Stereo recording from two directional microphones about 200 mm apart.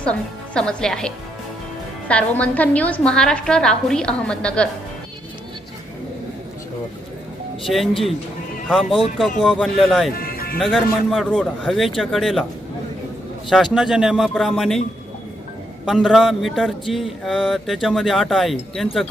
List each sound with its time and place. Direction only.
0.0 s a woman's voice: 5° left (ahead or behind)
8.6 s a woman's voice: centre (ahead or behind)
10.2 s music: 50° left (ahead or behind)
10.6 s a woman's voice: centre (ahead or behind)
13.5 s a woman's voice: centre (ahead or behind)
15.9 s a woman's voice: centre (ahead or behind)